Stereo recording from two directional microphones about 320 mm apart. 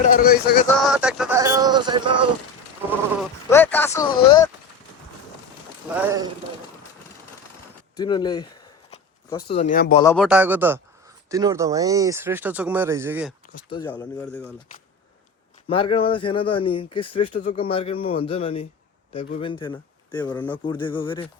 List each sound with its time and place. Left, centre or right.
0.0 s speech: left
0.8 s speech: centre
3.5 s speech: centre
6.0 s speech: centre
7.9 s speech: centre
10.0 s speech: centre
10.2 s a man's voice: centre
13.7 s speech: centre
15.7 s speech: centre